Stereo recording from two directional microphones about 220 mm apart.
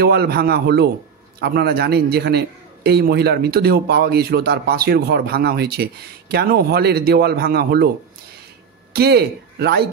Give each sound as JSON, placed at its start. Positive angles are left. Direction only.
{"t": 0.0, "sound": "a man's voice", "side_deg": -45}
{"t": 8.9, "sound": "a man's voice", "side_deg": -45}